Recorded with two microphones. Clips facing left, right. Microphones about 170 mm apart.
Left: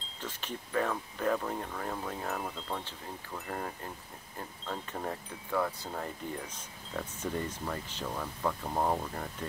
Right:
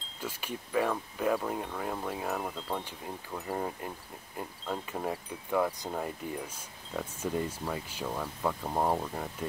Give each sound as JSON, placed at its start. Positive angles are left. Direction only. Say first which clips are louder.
{"t": 0.2, "sound": "speech", "louder": "right 2 dB", "side_deg": -10}
{"t": 3.4, "sound": "speech", "louder": "right 4 dB", "side_deg": -15}